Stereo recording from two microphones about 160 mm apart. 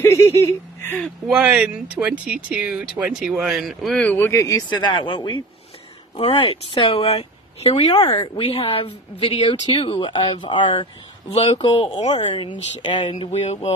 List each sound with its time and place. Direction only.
0.0 s speech: 15° left (ahead or behind)
1.3 s a woman's voice: 10° right (ahead or behind); by 13.7 s 40° left (ahead or behind)